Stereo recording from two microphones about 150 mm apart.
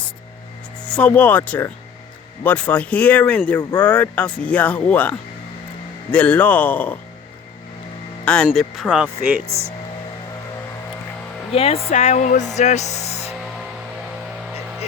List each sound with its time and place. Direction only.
0.9 s speech: 10° left (ahead or behind)
8.2 s speech: 5° left (ahead or behind)
8.5 s speech: 5° right (ahead or behind)
11.5 s speech: 40° left (ahead or behind)